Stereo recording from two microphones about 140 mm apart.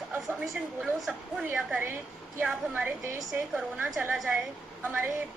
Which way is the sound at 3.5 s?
Centre (ahead or behind).